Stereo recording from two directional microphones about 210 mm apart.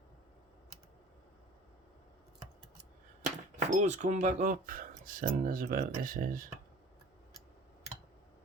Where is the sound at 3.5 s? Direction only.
35° right (ahead or behind).